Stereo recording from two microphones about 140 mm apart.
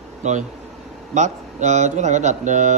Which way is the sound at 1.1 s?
60° right (ahead or behind).